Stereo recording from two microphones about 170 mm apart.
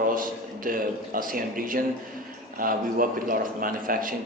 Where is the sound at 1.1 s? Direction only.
55° right (ahead or behind).